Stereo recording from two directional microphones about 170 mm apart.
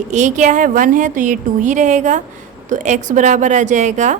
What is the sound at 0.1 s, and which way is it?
A woman's voice, 45° right (ahead or behind).